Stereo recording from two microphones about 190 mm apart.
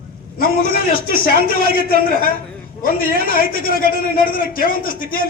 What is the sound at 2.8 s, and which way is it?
A man's voice, 50° left (ahead or behind).